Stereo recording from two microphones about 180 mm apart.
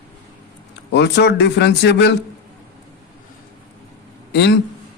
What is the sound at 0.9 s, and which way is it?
Speech, 70° left (ahead or behind).